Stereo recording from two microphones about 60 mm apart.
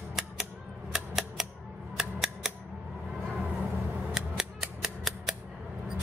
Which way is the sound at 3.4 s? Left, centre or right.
Right.